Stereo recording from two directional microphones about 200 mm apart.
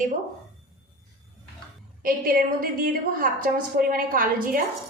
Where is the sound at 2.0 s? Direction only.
45° right (ahead or behind).